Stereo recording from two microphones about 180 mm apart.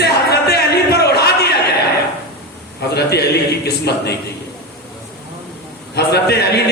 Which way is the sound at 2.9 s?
65° left (ahead or behind).